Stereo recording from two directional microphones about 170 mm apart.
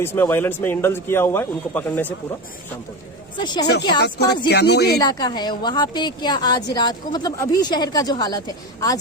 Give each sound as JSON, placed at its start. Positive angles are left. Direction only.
{"t": 0.0, "sound": "a man's voice", "side_deg": 15}
{"t": 3.3, "sound": "a woman's voice", "side_deg": 25}
{"t": 4.0, "sound": "speech", "side_deg": 75}
{"t": 4.9, "sound": "a woman's voice", "side_deg": 25}